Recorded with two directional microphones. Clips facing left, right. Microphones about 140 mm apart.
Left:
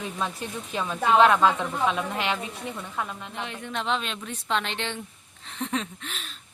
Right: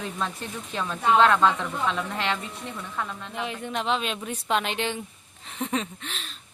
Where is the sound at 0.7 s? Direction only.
10° left (ahead or behind).